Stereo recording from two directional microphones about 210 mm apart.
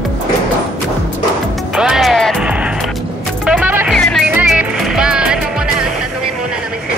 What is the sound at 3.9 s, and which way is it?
Music, 5° left (ahead or behind).